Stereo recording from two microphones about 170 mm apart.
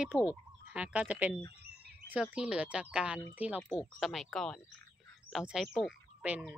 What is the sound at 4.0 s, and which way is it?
Speech, centre (ahead or behind).